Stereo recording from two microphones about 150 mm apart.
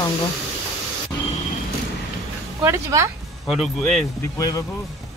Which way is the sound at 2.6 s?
20° right (ahead or behind).